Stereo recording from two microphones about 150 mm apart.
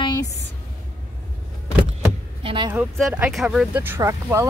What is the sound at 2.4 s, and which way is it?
Speech, 35° right (ahead or behind).